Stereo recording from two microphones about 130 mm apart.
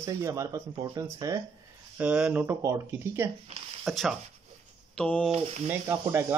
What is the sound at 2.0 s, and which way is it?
Speech, 10° right (ahead or behind).